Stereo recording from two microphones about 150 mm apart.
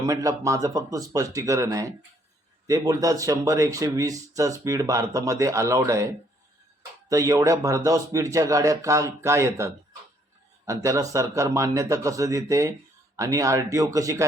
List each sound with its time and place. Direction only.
0.1 s speech: 20° right (ahead or behind)